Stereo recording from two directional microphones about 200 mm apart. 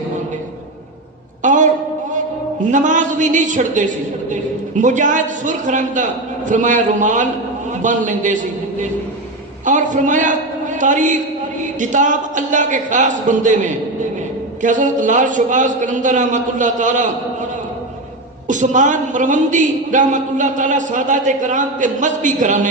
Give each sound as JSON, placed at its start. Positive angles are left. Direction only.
{"t": 1.4, "sound": "a sound", "side_deg": -40}
{"t": 2.6, "sound": "a man's voice", "side_deg": -40}
{"t": 9.6, "sound": "a man's voice", "side_deg": -40}
{"t": 18.4, "sound": "a man's voice", "side_deg": -40}